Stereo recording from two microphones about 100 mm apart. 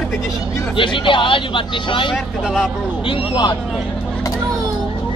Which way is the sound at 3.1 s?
55° left (ahead or behind).